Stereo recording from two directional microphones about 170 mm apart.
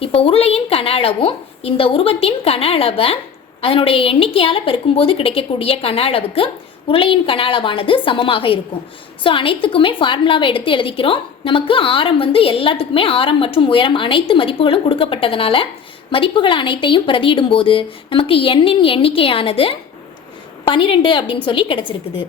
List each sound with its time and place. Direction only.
0.0 s a woman's voice: 35° left (ahead or behind)